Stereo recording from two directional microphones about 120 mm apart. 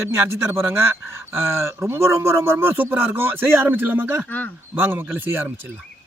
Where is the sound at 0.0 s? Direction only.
20° right (ahead or behind).